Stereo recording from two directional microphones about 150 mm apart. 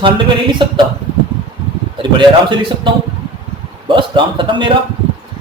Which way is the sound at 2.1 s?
35° right (ahead or behind).